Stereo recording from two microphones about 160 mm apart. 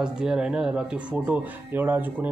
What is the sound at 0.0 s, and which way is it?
Speech, 5° right (ahead or behind).